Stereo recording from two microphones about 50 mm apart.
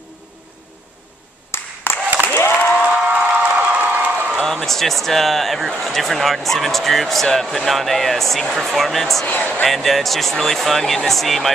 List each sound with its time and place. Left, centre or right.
1.5 s clapping: left
2.3 s a sound: left
2.9 s a sound: right
4.5 s speech: centre
9.2 s speech: left
9.7 s speech: centre